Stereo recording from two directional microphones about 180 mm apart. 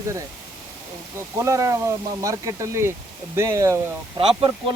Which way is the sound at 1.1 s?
15° right (ahead or behind).